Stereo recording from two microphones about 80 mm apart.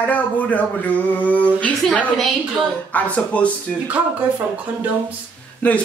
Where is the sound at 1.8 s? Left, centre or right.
Centre.